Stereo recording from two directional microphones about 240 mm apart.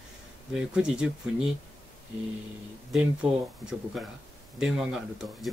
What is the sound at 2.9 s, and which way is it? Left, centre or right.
Speech, centre.